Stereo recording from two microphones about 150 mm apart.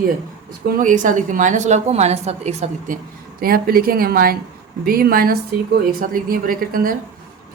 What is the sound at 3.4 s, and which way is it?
A woman's voice, 80° right.